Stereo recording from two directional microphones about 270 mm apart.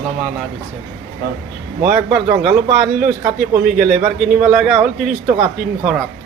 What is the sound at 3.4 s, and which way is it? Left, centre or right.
Speech, right.